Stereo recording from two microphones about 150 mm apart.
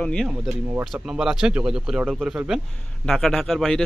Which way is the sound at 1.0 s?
5° right (ahead or behind).